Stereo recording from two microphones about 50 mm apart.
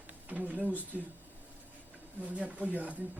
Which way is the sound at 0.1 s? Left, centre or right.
Right.